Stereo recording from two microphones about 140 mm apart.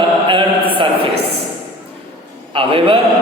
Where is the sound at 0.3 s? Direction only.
35° right (ahead or behind).